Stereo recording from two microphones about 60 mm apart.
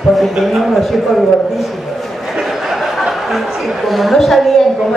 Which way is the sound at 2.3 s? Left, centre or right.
Centre.